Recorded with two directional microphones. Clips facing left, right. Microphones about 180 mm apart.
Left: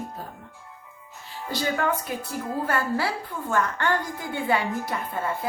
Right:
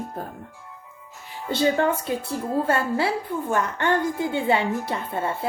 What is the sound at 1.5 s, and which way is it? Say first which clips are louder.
A woman's voice: right 5 dB; 25° right (ahead or behind).